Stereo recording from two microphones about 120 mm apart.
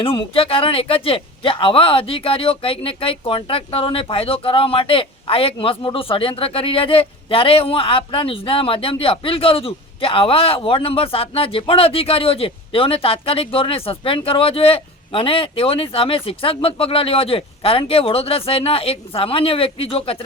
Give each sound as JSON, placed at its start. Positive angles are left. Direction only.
{"t": 0.0, "sound": "a man's voice", "side_deg": 50}